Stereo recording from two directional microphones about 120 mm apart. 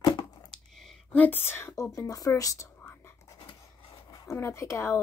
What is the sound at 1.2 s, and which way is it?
A woman's voice, 15° left (ahead or behind).